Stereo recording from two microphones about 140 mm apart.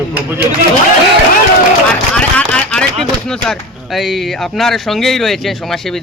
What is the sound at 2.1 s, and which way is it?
A man's voice, 10° left (ahead or behind).